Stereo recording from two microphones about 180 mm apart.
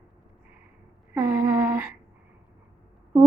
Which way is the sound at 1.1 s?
10° right (ahead or behind).